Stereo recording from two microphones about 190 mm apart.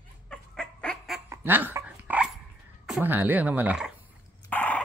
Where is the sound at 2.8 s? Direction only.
5° right (ahead or behind).